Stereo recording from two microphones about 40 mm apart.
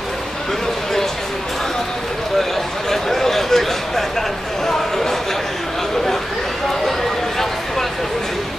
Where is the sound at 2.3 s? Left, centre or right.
Centre.